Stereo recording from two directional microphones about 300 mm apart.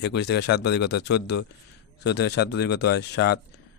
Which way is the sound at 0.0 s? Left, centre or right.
Left.